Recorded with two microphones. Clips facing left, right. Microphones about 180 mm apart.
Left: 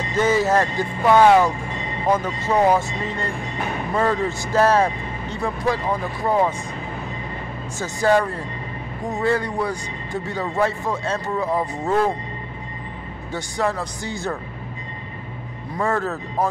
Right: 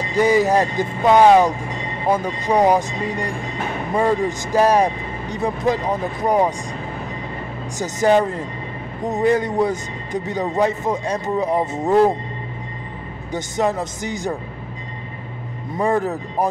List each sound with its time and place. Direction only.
0.1 s speech: 15° right (ahead or behind)
7.8 s speech: 20° right (ahead or behind)
13.3 s speech: 20° right (ahead or behind)
15.7 s speech: 15° right (ahead or behind)